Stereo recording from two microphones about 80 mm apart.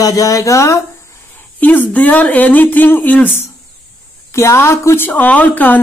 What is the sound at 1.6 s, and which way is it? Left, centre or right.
A woman's voice, centre.